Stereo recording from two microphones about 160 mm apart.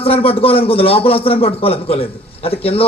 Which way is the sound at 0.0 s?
35° left (ahead or behind).